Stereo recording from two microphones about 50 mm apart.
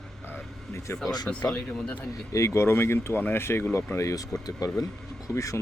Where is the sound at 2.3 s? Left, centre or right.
Left.